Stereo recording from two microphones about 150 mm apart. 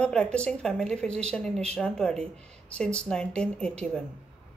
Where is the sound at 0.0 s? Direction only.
5° left (ahead or behind).